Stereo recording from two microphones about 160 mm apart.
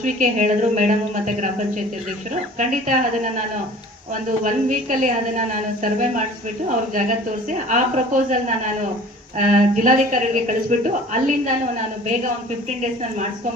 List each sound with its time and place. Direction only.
0.0 s a woman's voice: 50° right (ahead or behind)
4.4 s a woman's voice: 50° right (ahead or behind)
7.7 s a woman's voice: 50° right (ahead or behind)